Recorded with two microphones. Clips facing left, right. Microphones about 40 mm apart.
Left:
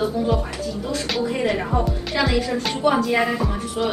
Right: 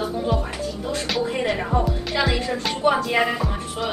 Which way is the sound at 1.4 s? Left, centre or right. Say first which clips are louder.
Left 1 dB; centre.